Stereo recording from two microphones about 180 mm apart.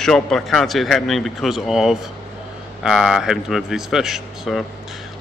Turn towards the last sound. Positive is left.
turn(degrees=0)  # may be behind; listen again after turning